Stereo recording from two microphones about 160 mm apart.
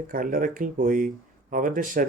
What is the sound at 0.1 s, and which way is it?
Speech, 60° right (ahead or behind).